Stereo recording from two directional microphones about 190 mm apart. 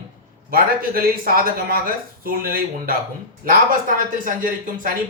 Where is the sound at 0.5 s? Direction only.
50° right (ahead or behind).